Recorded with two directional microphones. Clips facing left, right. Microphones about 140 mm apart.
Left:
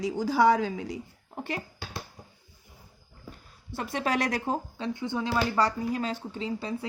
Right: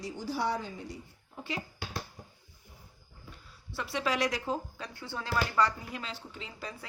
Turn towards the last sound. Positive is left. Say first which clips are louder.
# left 11 dB
turn(degrees=30)  # may be behind; listen again after turning